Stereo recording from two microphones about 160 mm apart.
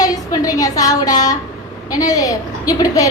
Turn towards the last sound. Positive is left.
turn(degrees=20)  # may be behind; listen again after turning